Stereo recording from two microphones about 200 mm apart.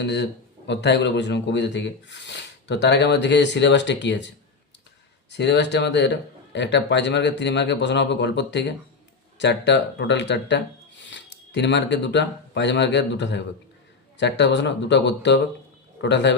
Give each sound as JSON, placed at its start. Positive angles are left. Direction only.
{"t": 0.0, "sound": "speech", "side_deg": 60}
{"t": 5.3, "sound": "a man's voice", "side_deg": 60}